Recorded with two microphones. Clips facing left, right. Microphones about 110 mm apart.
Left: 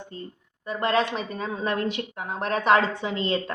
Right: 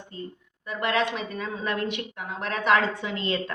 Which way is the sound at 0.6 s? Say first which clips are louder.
Left 2 dB; 35° left (ahead or behind).